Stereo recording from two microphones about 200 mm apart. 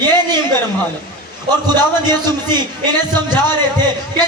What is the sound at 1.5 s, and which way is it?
A man's voice, 20° right (ahead or behind).